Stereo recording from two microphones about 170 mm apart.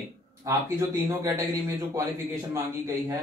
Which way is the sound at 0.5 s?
15° right (ahead or behind).